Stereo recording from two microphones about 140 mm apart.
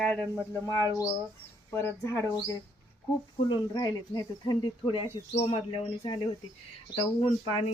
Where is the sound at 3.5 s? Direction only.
30° left (ahead or behind).